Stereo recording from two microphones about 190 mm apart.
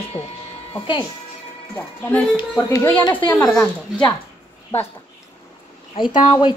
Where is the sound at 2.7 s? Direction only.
20° left (ahead or behind).